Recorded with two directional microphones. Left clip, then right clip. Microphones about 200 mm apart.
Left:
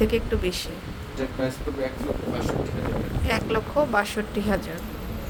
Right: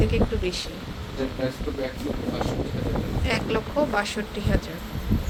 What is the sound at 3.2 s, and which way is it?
Speech, 20° left (ahead or behind).